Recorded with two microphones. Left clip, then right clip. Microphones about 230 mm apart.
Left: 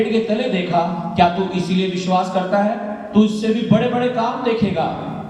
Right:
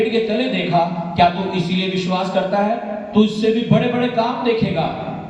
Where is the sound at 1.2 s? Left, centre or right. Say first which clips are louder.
Right 1 dB; left.